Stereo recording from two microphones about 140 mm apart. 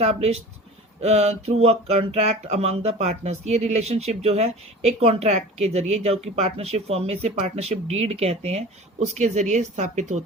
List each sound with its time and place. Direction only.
0.0 s speech: 50° right (ahead or behind)